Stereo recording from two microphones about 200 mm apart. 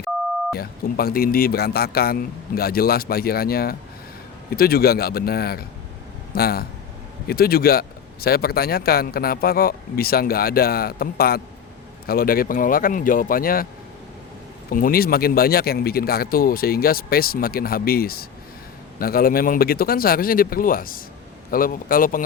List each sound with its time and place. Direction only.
0.5 s speech: 50° left (ahead or behind)
14.7 s speech: 45° left (ahead or behind)